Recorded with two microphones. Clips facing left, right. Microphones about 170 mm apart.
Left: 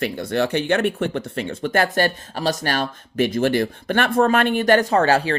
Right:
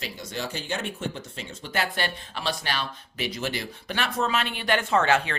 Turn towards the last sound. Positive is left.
turn(degrees=35)  # may be behind; listen again after turning